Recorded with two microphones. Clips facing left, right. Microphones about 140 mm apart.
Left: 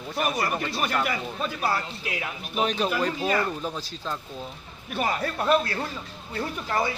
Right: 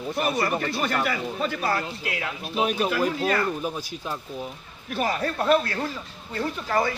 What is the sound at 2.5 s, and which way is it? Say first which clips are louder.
Speech: right 1 dB; 10° right (ahead or behind).